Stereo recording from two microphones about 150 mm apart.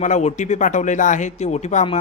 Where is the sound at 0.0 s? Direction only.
50° left (ahead or behind).